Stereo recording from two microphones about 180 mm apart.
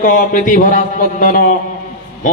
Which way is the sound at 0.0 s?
45° left (ahead or behind).